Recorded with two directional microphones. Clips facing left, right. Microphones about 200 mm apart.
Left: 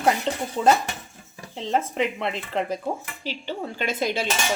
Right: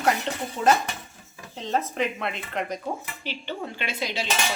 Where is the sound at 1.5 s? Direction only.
25° left (ahead or behind).